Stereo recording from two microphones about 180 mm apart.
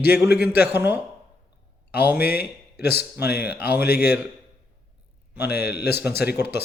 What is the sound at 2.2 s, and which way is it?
Speech, 60° left (ahead or behind).